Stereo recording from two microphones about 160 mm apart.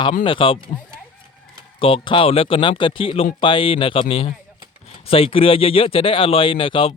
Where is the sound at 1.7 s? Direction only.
35° left (ahead or behind).